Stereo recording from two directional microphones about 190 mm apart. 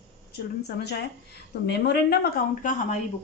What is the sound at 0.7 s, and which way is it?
Speech, 60° left (ahead or behind).